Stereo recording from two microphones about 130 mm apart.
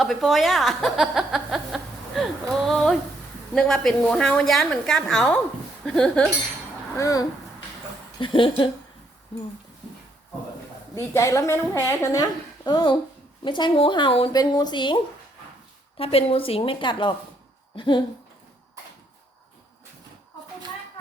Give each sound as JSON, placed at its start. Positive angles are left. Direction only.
{"t": 0.0, "sound": "chuckle", "side_deg": 0}
{"t": 3.5, "sound": "a woman's voice", "side_deg": 5}
{"t": 6.9, "sound": "a woman's voice", "side_deg": 25}
{"t": 8.2, "sound": "speech", "side_deg": 40}
{"t": 10.9, "sound": "a woman's voice", "side_deg": 20}
{"t": 16.0, "sound": "a woman's voice", "side_deg": 45}